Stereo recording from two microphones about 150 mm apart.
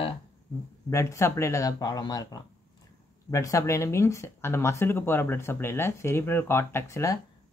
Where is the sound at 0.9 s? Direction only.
20° left (ahead or behind).